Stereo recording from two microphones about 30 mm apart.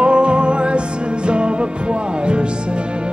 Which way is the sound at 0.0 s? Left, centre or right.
Right.